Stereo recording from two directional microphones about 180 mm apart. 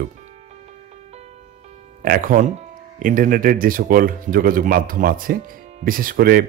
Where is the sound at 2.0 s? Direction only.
50° right (ahead or behind).